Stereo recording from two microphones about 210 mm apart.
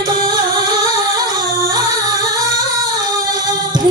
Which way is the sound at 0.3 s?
20° right (ahead or behind).